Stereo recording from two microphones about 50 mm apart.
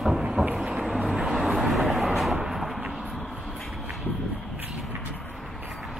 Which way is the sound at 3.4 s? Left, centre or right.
Centre.